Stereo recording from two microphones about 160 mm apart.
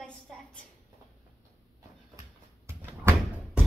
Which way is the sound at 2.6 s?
15° right (ahead or behind).